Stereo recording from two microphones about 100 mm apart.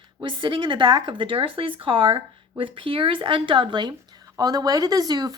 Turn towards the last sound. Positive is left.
turn(degrees=-40)  # may be behind; listen again after turning